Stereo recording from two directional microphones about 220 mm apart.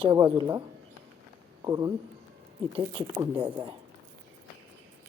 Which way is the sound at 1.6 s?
15° right (ahead or behind).